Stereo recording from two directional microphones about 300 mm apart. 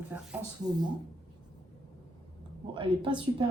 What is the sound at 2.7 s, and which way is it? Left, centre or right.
Speech, centre.